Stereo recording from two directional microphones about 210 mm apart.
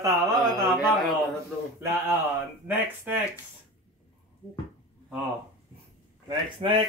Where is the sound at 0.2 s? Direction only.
Centre (ahead or behind).